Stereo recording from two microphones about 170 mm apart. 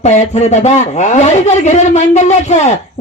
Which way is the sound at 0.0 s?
40° left (ahead or behind).